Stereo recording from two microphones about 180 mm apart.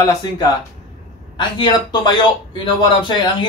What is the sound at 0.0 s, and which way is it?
A man's voice, 25° left (ahead or behind).